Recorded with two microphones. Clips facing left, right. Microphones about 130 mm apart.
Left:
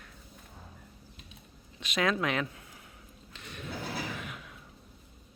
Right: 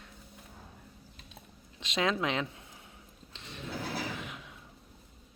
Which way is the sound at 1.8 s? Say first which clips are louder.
Left 1 dB; 25° right (ahead or behind).